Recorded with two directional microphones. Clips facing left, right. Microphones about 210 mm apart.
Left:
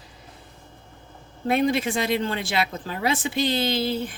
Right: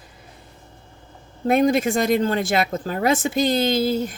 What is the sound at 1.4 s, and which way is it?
Speech, 45° right (ahead or behind).